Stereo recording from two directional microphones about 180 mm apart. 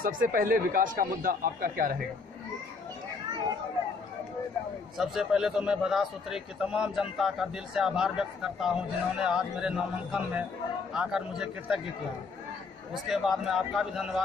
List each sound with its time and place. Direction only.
0.0 s speech: 50° right (ahead or behind)
4.9 s a man's voice: 5° right (ahead or behind)
13.1 s a man's voice: centre (ahead or behind)